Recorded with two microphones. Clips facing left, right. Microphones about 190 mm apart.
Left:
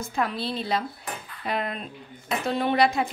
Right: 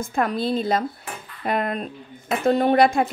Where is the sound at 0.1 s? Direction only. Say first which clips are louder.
Right 6 dB; 50° right (ahead or behind).